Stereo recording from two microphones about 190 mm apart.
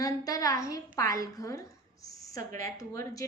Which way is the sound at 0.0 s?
20° left (ahead or behind).